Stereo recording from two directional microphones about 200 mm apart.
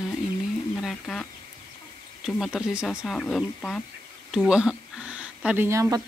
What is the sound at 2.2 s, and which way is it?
Speech, centre (ahead or behind).